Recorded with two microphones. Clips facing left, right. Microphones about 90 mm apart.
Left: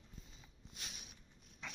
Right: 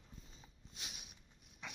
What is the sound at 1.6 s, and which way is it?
Dog, 10° right (ahead or behind).